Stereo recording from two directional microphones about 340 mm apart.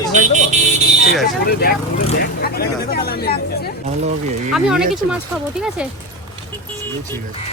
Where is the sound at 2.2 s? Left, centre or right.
Left.